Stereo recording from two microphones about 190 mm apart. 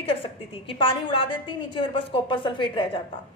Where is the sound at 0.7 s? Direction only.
25° left (ahead or behind).